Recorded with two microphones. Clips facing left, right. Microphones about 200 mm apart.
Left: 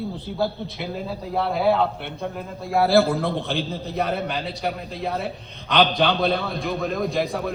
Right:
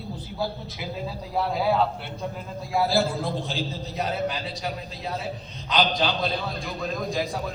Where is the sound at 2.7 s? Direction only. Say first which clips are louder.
Left 6 dB; 60° left (ahead or behind).